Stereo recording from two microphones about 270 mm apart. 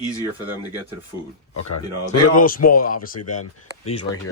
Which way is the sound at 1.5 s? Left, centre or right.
Left.